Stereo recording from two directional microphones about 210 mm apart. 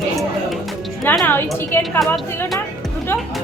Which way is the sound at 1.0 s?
10° left (ahead or behind).